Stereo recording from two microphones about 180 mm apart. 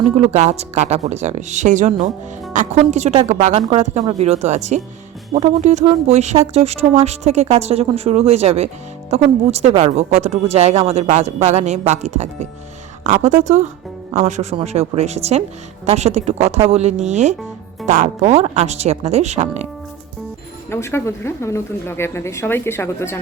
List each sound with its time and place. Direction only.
0.2 s a woman's voice: 40° right (ahead or behind)
20.7 s speech: 15° left (ahead or behind)